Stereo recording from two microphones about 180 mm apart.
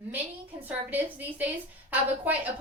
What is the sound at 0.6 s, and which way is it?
A woman's voice, 10° right (ahead or behind).